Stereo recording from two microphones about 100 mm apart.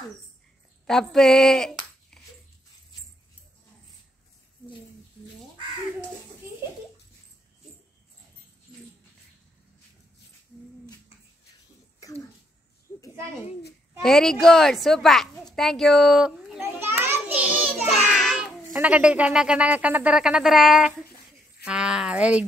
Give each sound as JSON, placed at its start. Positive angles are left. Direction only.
{"t": 0.8, "sound": "a child's voice", "side_deg": 5}
{"t": 12.0, "sound": "throat clearing", "side_deg": 30}
{"t": 14.0, "sound": "a child's voice", "side_deg": 5}
{"t": 16.6, "sound": "a sound", "side_deg": -25}
{"t": 17.8, "sound": "a child's voice", "side_deg": 0}